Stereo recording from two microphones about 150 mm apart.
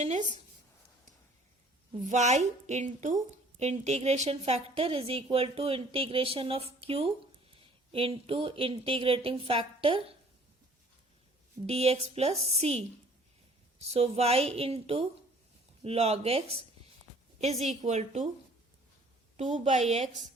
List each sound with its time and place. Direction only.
0.0 s a woman's voice: 55° right (ahead or behind)
2.0 s a woman's voice: 50° right (ahead or behind); by 10.0 s 35° right (ahead or behind)
11.6 s a woman's voice: 45° right (ahead or behind)
17.7 s a woman's voice: 50° right (ahead or behind)
19.4 s a woman's voice: 50° right (ahead or behind)